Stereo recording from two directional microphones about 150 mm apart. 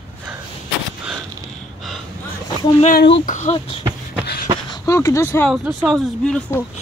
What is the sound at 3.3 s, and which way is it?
Speech, 45° left (ahead or behind).